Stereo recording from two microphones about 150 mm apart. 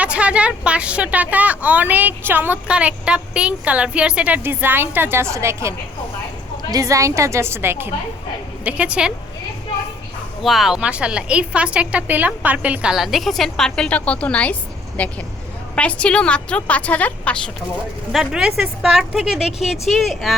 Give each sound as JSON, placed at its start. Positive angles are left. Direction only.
{"t": 0.0, "sound": "a woman's voice", "side_deg": -10}
{"t": 10.4, "sound": "a woman's voice", "side_deg": 0}